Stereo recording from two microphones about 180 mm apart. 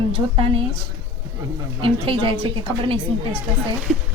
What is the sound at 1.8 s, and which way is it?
Speech, 30° right (ahead or behind).